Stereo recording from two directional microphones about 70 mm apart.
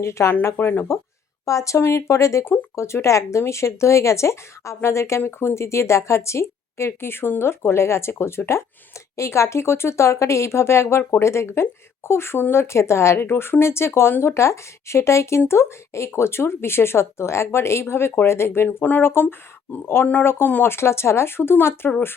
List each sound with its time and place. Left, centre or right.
0.0 s speech: left
1.5 s speech: left
18.8 s speech: left